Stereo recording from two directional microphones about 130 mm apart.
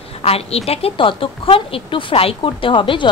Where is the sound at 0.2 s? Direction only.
50° left (ahead or behind).